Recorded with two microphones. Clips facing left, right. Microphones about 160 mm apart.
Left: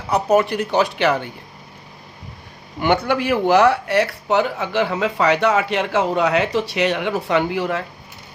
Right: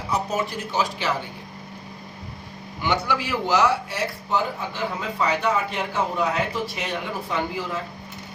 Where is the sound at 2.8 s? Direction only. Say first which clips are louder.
Left 6 dB; 55° left (ahead or behind).